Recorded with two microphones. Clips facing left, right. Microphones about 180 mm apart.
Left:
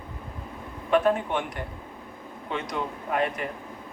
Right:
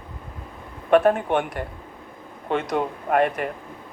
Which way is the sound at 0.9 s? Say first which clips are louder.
Right 5 dB; 55° right (ahead or behind).